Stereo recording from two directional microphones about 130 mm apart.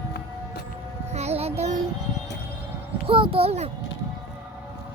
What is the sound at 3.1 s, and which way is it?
Speech, 45° right (ahead or behind).